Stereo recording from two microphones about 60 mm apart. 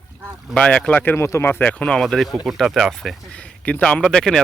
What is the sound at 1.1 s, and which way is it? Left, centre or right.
Speech, left.